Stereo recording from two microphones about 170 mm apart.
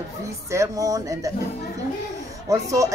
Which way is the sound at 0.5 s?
20° right (ahead or behind).